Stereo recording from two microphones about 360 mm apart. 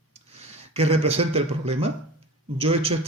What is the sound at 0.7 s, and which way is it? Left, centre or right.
A man's voice, centre.